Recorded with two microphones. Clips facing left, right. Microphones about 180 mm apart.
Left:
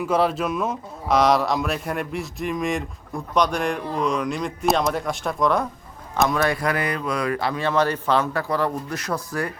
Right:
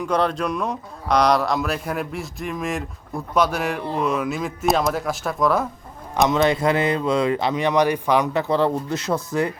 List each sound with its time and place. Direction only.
0.0 s a man's voice: 5° left (ahead or behind)
6.2 s speech: 20° right (ahead or behind)